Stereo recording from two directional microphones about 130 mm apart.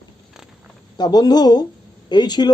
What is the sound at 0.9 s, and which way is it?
Speech, 30° left (ahead or behind).